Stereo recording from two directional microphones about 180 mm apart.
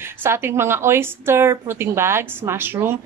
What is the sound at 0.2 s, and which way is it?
A woman's voice, 15° right (ahead or behind).